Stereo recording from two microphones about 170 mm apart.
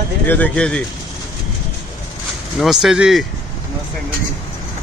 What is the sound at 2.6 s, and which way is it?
Speech, centre (ahead or behind).